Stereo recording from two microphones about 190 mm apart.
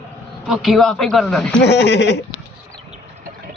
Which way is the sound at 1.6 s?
65° left (ahead or behind).